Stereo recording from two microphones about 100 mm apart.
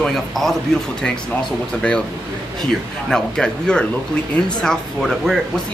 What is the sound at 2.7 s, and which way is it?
Speech, 5° left (ahead or behind).